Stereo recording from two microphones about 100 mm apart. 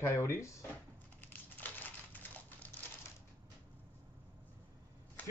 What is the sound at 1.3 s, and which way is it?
Typing, 15° left (ahead or behind).